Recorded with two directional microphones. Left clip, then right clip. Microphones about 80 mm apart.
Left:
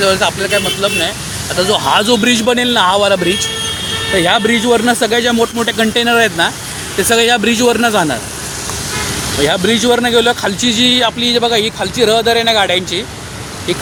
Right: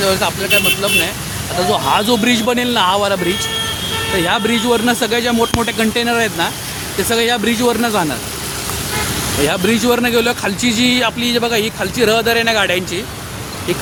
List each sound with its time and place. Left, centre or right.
0.0 s speech: centre
6.1 s speech: centre
9.5 s a man's voice: centre